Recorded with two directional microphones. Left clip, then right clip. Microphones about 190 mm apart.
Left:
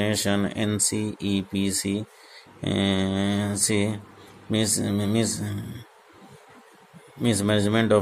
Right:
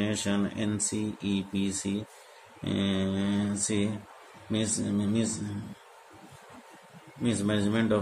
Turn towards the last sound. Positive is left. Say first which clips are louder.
# left 6 dB
turn(degrees=50)  # may be behind; listen again after turning